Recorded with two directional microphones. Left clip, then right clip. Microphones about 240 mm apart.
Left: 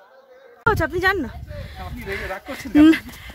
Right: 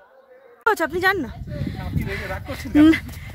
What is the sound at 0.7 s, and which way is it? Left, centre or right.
Speech, centre.